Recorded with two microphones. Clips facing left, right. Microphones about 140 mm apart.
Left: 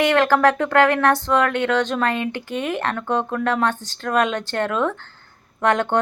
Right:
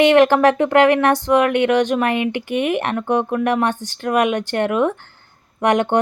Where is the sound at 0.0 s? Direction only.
20° right (ahead or behind).